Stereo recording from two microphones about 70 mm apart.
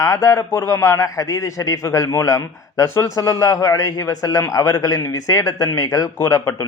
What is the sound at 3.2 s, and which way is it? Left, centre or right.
A man's voice, left.